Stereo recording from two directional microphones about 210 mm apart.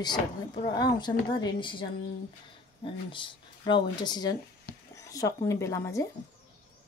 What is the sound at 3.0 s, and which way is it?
Speech, 25° left (ahead or behind).